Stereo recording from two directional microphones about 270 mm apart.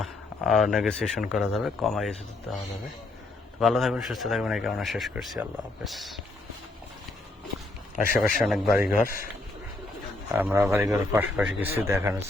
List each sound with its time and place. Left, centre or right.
0.0 s a man's voice: centre
3.6 s a man's voice: centre
7.9 s a man's voice: left
8.4 s a man's voice: centre
9.0 s speech: left
10.3 s a man's voice: centre